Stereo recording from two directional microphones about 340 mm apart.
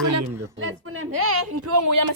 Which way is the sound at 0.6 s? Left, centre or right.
Right.